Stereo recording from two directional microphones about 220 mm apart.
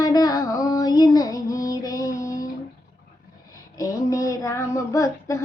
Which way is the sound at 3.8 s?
15° left (ahead or behind).